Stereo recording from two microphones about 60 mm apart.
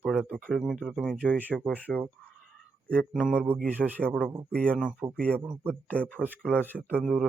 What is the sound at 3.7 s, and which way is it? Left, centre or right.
Speech, right.